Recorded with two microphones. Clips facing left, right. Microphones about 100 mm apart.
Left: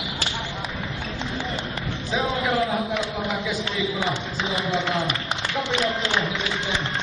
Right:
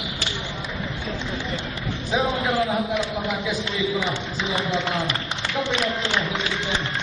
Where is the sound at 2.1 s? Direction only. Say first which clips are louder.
Right 1 dB; centre (ahead or behind).